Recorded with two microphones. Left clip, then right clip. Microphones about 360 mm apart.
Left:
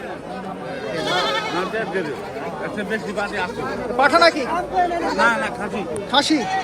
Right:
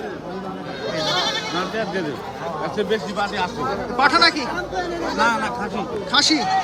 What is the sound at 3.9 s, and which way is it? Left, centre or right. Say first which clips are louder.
Speech: left 2 dB; centre.